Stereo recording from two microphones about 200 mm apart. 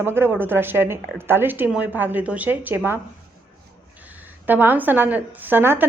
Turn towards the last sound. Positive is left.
turn(degrees=-10)  # may be behind; listen again after turning